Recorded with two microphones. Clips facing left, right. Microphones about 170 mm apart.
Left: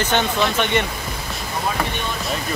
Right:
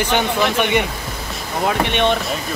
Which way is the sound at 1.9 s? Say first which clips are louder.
Right 10 dB; 75° right (ahead or behind).